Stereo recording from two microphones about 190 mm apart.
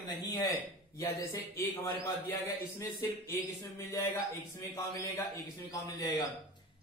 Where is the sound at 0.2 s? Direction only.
20° left (ahead or behind).